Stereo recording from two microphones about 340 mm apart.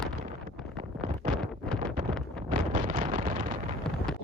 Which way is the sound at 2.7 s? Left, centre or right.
Right.